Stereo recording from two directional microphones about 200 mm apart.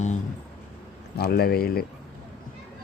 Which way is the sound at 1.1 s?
50° left (ahead or behind).